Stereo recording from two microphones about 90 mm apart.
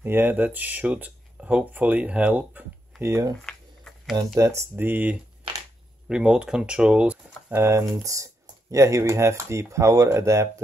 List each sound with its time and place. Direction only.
0.0 s speech: 25° right (ahead or behind)
3.1 s speech: 40° right (ahead or behind)
3.4 s a sound: 5° left (ahead or behind)
4.4 s speech: 35° right (ahead or behind)
4.7 s speech: 20° right (ahead or behind)
7.6 s speech: 35° right (ahead or behind)